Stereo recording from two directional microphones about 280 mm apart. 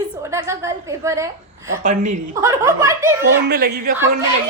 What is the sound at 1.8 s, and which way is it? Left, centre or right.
Speech, right.